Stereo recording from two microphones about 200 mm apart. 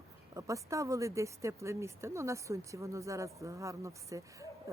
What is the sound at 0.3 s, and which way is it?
Speech, 15° right (ahead or behind).